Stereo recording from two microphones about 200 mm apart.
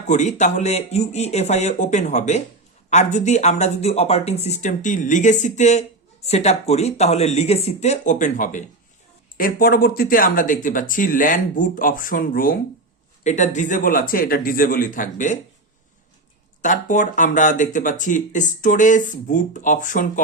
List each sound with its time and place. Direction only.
0.1 s speech: 35° left (ahead or behind)
16.6 s speech: 40° left (ahead or behind)